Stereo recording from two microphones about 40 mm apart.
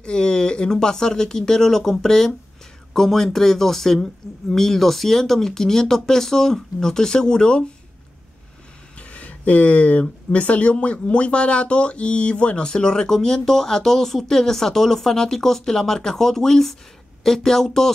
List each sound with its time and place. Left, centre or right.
0.0 s speech: left
9.1 s speech: left; by 17.9 s centre